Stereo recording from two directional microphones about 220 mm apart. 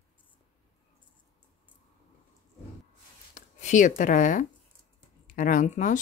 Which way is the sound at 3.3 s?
35° left (ahead or behind).